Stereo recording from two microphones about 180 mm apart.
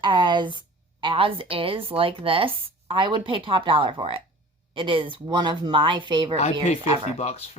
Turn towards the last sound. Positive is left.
turn(degrees=35)  # may be behind; listen again after turning